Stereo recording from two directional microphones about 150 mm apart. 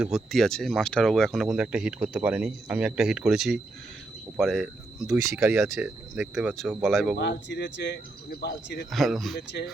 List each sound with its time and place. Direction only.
0.0 s speech: centre (ahead or behind)
5.3 s speech: 20° right (ahead or behind)
5.8 s speech: 5° right (ahead or behind)
8.3 s insect: 90° left
8.9 s speech: centre (ahead or behind)